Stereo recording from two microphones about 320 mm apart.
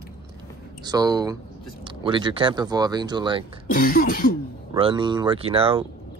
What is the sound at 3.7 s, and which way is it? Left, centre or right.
Throat clearing, left.